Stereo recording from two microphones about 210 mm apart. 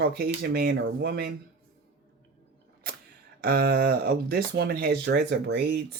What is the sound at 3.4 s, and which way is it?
Speech, 45° right (ahead or behind).